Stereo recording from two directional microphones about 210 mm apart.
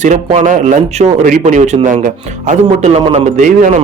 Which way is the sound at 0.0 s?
35° right (ahead or behind).